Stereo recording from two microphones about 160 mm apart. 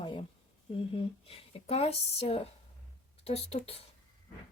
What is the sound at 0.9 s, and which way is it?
Speech, 40° left (ahead or behind).